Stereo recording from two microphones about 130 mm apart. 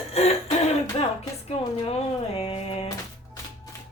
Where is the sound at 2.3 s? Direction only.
50° left (ahead or behind).